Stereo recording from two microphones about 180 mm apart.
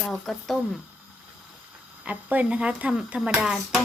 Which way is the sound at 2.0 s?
10° right (ahead or behind).